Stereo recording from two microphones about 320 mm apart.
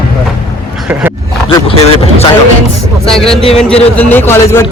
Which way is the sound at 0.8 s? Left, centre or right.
Centre.